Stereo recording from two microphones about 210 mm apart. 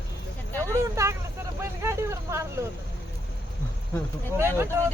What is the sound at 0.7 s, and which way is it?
Vehicle, 15° right (ahead or behind).